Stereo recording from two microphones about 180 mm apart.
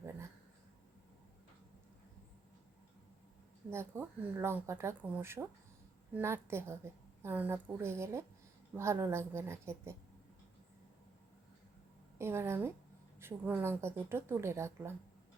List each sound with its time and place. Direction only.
3.7 s speech: 15° right (ahead or behind)
12.2 s speech: 15° right (ahead or behind)